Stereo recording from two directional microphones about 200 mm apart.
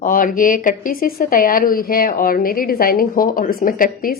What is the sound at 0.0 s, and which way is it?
Speech, 45° left (ahead or behind).